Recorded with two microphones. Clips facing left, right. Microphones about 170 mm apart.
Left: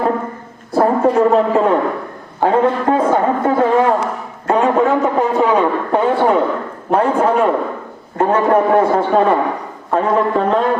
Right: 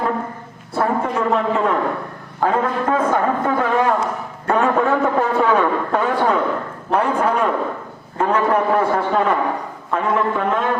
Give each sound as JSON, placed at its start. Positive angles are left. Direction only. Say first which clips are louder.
{"t": 0.8, "sound": "a man's voice", "louder": "left 7 dB", "side_deg": 35}